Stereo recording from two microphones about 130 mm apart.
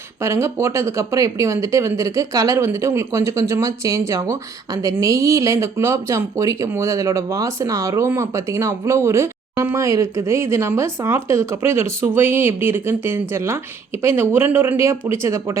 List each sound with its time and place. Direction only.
0.2 s speech: 20° right (ahead or behind)